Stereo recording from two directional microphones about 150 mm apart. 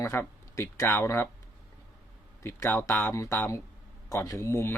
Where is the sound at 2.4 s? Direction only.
15° left (ahead or behind).